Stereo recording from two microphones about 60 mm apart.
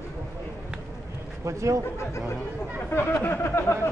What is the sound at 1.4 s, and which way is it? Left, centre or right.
Speech, right.